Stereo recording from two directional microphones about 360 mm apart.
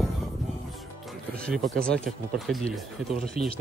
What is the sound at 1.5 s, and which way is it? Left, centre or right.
Speech, centre.